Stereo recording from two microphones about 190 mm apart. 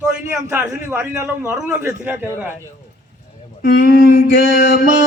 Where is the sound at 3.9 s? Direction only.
50° left (ahead or behind).